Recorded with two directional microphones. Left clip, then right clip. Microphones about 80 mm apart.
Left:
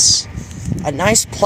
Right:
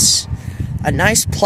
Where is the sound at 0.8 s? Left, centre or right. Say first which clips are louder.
Right 1 dB; right.